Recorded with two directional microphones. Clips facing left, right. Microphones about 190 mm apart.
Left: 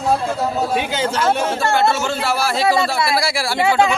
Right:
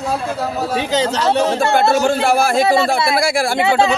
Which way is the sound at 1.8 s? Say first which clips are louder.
Right 4 dB; 50° right (ahead or behind).